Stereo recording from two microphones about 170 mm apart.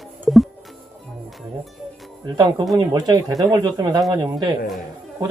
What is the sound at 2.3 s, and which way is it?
A man's voice, 25° right (ahead or behind).